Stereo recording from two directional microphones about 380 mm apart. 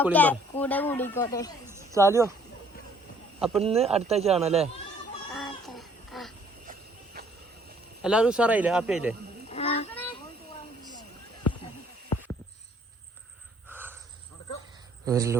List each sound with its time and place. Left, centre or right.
0.0 s speech: centre
1.6 s speech: centre
3.6 s a man's voice: centre
5.3 s a sound: centre
6.7 s cricket: right
8.0 s speech: centre
9.5 s a sound: centre
13.7 s a sound: centre
15.0 s a man's voice: centre